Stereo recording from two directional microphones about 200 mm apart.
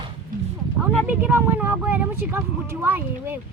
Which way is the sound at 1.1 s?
10° right (ahead or behind).